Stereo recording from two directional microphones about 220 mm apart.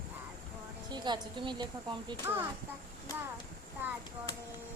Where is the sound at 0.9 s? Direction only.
20° right (ahead or behind).